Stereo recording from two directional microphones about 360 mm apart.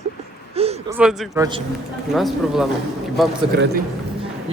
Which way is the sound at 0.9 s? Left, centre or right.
Centre.